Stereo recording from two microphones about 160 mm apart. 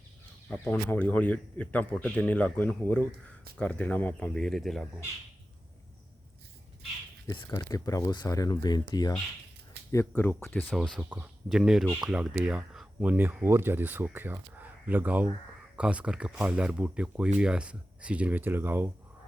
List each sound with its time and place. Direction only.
0.4 s speech: 10° left (ahead or behind)
7.5 s speech: 20° left (ahead or behind)
10.1 s speech: 10° left (ahead or behind); by 18.9 s 15° right (ahead or behind)